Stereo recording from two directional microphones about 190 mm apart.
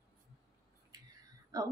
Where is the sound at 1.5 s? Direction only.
20° right (ahead or behind).